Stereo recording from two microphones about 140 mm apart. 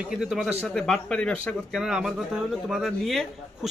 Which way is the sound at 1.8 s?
5° right (ahead or behind).